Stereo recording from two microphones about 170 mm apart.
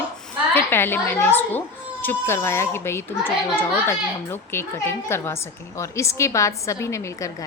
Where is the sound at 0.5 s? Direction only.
10° left (ahead or behind).